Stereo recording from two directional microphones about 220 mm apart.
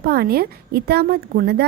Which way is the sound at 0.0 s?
45° right (ahead or behind).